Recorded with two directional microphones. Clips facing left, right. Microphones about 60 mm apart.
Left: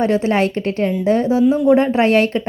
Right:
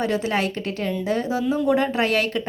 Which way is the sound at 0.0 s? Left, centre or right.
Left.